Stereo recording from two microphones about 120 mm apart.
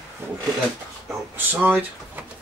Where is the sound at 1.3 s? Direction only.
15° right (ahead or behind).